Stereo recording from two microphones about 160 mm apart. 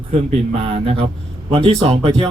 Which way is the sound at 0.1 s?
35° right (ahead or behind).